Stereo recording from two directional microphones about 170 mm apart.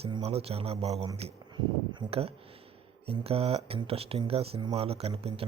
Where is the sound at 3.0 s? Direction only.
35° right (ahead or behind).